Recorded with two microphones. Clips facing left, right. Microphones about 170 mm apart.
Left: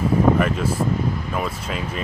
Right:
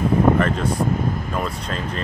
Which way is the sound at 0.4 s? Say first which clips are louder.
Right 1 dB; 10° left (ahead or behind).